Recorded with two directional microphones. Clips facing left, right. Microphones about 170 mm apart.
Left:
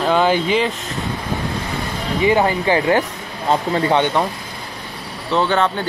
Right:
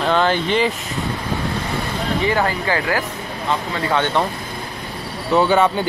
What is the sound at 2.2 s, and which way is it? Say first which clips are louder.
Speech: left 6 dB; 20° left (ahead or behind).